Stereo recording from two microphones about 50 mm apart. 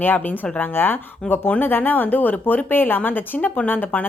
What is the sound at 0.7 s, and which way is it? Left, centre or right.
A woman's voice, left.